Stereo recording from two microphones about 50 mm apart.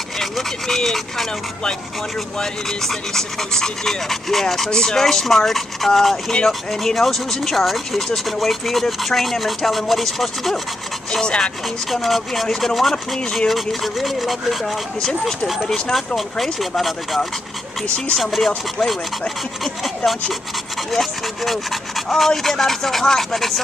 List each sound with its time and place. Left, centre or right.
0.2 s speech: centre
4.6 s rub: centre
11.1 s speech: centre
11.9 s rub: centre
13.1 s speech: centre
13.5 s rub: centre
15.0 s speech: centre
15.6 s rub: centre
17.8 s speech: left
18.2 s rub: centre
20.9 s rub: centre